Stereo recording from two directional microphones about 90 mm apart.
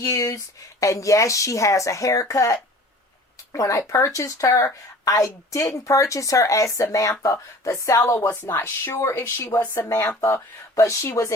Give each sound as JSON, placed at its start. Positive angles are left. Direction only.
{"t": 0.0, "sound": "speech", "side_deg": 40}
{"t": 8.4, "sound": "speech", "side_deg": 25}